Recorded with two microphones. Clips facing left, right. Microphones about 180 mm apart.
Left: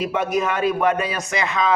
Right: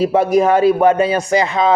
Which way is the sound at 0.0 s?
30° right (ahead or behind).